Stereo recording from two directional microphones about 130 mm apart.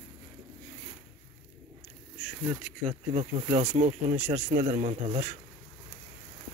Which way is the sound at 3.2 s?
70° right (ahead or behind).